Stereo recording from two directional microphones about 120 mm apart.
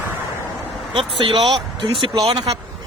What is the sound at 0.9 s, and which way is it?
Speech, 45° right (ahead or behind).